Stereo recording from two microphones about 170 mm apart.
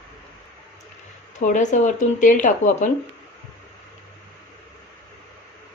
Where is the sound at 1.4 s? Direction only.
45° left (ahead or behind).